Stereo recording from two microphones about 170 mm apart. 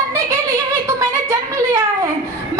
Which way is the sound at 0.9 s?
15° right (ahead or behind).